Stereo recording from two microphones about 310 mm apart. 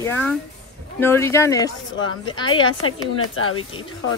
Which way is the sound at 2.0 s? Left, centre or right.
Left.